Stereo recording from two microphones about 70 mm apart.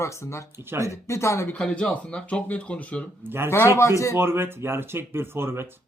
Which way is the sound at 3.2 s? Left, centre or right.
Right.